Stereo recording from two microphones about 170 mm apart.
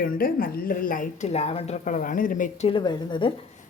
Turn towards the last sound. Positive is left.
turn(degrees=25)  # may be behind; listen again after turning